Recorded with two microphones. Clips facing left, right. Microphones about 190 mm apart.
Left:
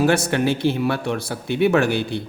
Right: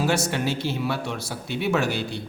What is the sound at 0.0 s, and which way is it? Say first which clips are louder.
A man's voice: left 6 dB; 60° left (ahead or behind).